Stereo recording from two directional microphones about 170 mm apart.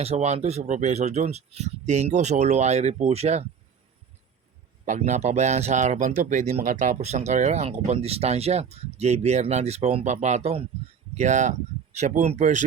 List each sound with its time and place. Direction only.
0.0 s speech: 40° right (ahead or behind)
4.9 s speech: 45° right (ahead or behind)